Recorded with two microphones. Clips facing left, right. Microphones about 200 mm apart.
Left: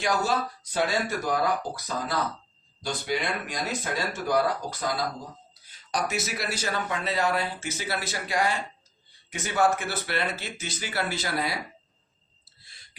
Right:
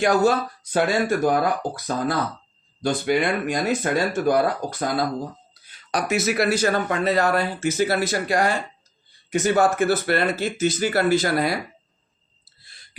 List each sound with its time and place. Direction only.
0.0 s speech: 55° right (ahead or behind)
5.6 s speech: 65° right (ahead or behind)